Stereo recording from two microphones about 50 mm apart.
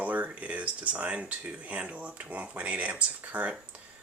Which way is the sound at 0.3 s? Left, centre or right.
Right.